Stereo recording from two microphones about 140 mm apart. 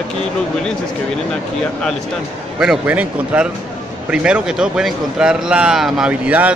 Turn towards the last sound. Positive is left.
turn(degrees=-10)  # may be behind; listen again after turning